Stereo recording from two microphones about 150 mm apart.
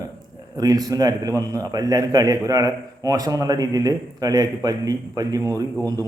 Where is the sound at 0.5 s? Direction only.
25° right (ahead or behind).